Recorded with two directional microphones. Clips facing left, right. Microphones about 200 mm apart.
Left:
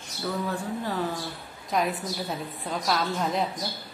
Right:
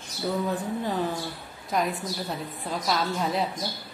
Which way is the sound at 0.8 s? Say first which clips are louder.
Right 1 dB; 20° right (ahead or behind).